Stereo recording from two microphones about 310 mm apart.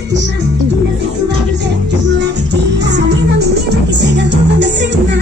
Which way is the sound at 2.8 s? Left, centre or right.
Right.